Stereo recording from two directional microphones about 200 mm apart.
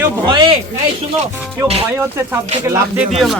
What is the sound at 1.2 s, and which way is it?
Music, 30° right (ahead or behind).